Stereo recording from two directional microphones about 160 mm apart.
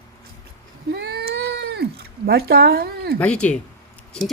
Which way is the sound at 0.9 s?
90° right.